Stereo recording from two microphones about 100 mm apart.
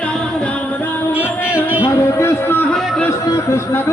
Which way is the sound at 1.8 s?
30° left (ahead or behind).